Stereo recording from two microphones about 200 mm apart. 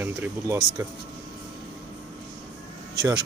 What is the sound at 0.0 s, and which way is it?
Speech, 10° right (ahead or behind).